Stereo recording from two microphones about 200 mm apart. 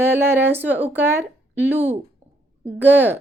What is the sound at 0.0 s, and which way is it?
Speech, 10° right (ahead or behind).